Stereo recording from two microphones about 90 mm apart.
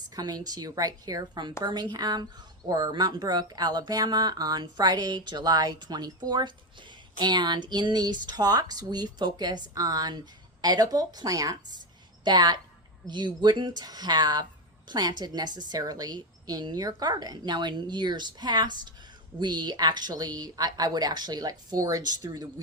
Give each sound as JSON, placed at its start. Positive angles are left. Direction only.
{"t": 0.2, "sound": "a woman's voice", "side_deg": -45}
{"t": 12.2, "sound": "a woman's voice", "side_deg": -50}